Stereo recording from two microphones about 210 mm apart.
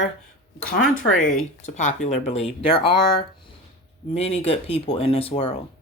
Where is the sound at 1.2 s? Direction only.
35° left (ahead or behind).